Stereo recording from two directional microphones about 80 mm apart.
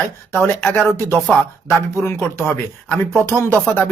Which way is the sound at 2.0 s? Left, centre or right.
Left.